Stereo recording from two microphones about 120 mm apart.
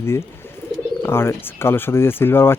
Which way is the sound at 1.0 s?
20° left (ahead or behind).